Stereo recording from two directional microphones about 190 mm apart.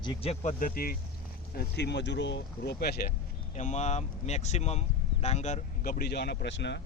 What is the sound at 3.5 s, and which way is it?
Speech, 40° left (ahead or behind).